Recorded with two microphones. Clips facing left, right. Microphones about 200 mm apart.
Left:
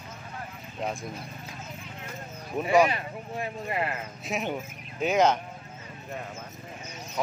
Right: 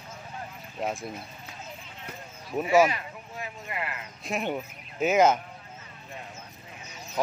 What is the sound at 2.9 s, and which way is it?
Speech, 30° left (ahead or behind).